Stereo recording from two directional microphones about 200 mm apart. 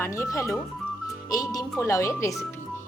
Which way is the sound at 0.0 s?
15° left (ahead or behind).